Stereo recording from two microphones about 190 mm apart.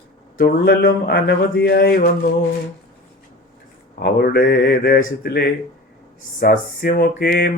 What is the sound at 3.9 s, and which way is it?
Speech, 55° left (ahead or behind).